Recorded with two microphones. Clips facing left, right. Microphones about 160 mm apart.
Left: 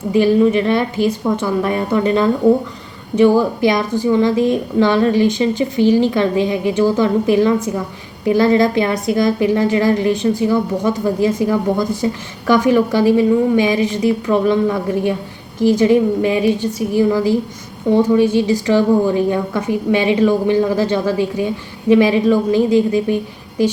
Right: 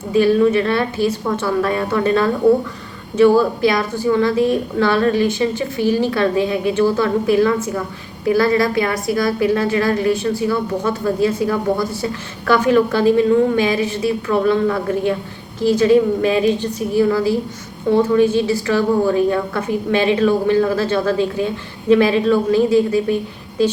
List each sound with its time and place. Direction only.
0.1 s a woman's voice: 15° left (ahead or behind)